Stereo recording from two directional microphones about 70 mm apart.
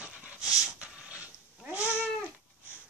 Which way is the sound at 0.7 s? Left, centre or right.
Centre.